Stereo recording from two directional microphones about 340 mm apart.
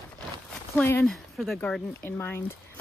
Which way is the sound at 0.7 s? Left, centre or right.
Centre.